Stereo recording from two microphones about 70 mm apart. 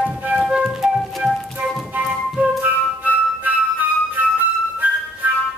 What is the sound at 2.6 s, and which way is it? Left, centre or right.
Music, right.